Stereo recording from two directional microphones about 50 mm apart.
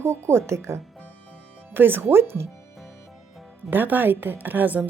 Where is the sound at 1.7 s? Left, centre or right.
Right.